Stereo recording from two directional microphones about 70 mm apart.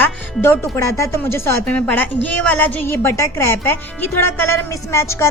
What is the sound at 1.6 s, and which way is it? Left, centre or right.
A woman's voice, centre.